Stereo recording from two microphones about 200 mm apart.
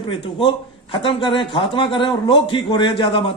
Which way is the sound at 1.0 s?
25° left (ahead or behind).